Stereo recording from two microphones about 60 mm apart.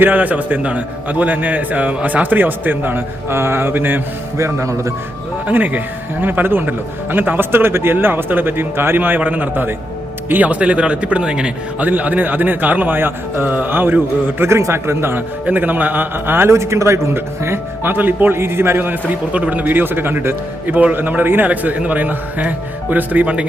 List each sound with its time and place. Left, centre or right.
0.0 s a man's voice: right
4.4 s speech: right
5.5 s a man's voice: right
15.4 s a man's voice: right
16.5 s a man's voice: right